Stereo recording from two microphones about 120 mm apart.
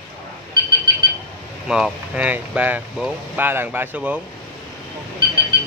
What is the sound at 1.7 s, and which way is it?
Speech, 5° right (ahead or behind).